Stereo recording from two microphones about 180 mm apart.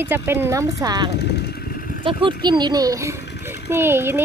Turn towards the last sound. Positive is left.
turn(degrees=-15)  # may be behind; listen again after turning